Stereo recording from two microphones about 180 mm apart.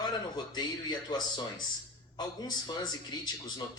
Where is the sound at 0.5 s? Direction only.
25° left (ahead or behind).